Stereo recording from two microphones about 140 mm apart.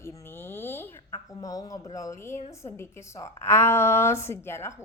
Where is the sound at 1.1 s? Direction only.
25° left (ahead or behind).